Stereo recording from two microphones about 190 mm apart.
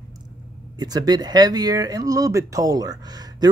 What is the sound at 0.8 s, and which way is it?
Speech, 20° right (ahead or behind).